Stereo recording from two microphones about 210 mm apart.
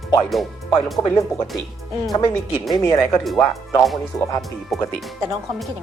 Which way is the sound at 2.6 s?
Centre (ahead or behind).